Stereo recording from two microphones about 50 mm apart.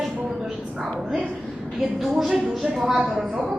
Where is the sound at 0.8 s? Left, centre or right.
Centre.